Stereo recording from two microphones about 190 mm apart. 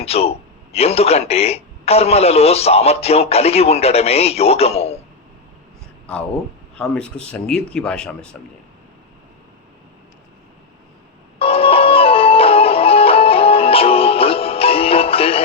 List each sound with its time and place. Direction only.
0.0 s speech: 30° left (ahead or behind)
6.7 s speech: 5° left (ahead or behind)
11.3 s music: 30° left (ahead or behind)